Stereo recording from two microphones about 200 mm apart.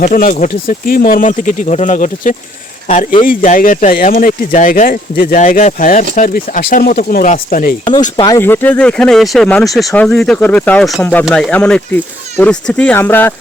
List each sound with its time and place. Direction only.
0.0 s speech: 40° left (ahead or behind)
8.1 s speech: 20° left (ahead or behind)
8.4 s speech: 10° left (ahead or behind)